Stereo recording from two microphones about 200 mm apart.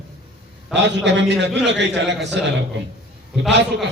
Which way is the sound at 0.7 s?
60° right (ahead or behind).